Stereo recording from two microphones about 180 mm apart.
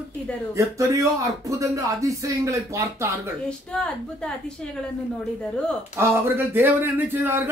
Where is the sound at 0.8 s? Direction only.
15° right (ahead or behind).